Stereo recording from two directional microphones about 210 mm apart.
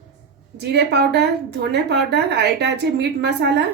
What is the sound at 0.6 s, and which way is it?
A woman's voice, 50° right (ahead or behind).